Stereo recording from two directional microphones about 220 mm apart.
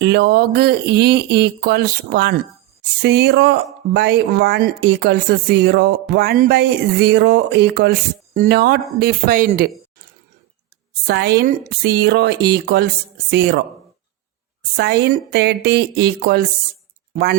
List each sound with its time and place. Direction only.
0.0 s speech: 50° right (ahead or behind)
11.0 s speech: 45° right (ahead or behind)
14.8 s speech: 50° right (ahead or behind)